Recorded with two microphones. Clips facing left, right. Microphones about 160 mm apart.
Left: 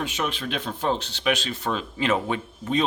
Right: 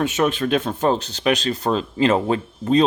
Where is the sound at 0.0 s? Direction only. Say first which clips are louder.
Right 9 dB; 50° right (ahead or behind).